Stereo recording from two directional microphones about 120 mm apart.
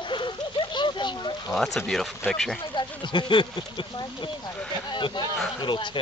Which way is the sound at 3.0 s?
45° left (ahead or behind).